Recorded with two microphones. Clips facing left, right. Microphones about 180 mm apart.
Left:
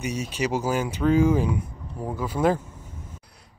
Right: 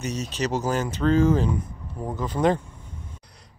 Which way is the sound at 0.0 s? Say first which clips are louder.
Even; 10° left (ahead or behind).